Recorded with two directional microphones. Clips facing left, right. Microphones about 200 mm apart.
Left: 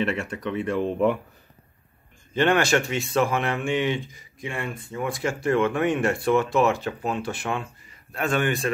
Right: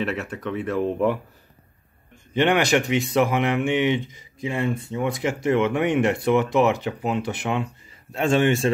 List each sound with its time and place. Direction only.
0.0 s speech: centre (ahead or behind)
2.3 s speech: 15° right (ahead or behind)